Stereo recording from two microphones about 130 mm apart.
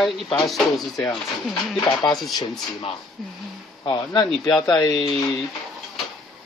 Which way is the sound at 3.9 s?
35° left (ahead or behind).